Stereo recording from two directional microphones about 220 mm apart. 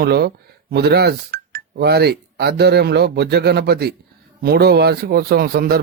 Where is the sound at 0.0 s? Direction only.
45° right (ahead or behind).